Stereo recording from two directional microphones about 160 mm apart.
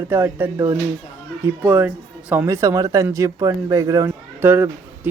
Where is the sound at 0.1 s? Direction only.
15° right (ahead or behind).